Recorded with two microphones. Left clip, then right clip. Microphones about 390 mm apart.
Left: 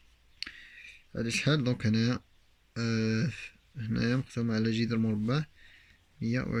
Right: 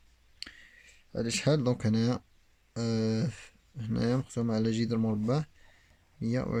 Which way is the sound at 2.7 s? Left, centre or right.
Right.